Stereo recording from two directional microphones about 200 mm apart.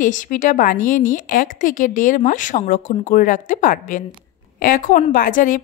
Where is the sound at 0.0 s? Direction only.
40° left (ahead or behind).